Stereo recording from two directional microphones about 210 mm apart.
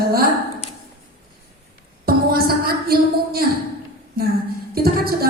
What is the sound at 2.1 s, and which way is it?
Music, 45° right (ahead or behind).